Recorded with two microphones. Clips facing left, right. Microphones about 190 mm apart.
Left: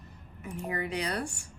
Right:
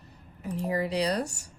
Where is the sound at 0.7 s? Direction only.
35° right (ahead or behind).